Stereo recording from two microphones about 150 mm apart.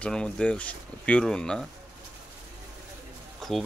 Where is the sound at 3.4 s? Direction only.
Centre (ahead or behind).